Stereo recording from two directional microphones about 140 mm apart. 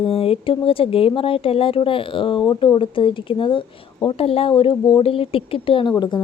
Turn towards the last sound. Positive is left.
turn(degrees=40)  # may be behind; listen again after turning